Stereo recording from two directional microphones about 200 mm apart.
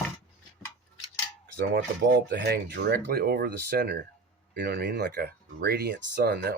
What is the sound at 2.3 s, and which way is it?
Speech, 55° right (ahead or behind).